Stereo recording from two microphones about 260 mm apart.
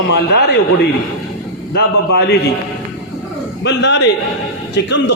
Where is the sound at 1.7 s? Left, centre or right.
Left.